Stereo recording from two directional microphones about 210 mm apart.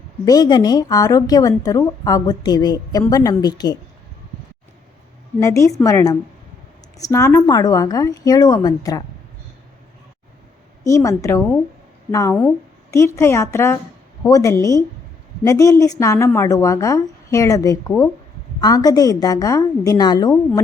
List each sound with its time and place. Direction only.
0.3 s a woman's voice: 20° left (ahead or behind)
5.4 s a woman's voice: 15° left (ahead or behind)
10.8 s a woman's voice: 15° left (ahead or behind)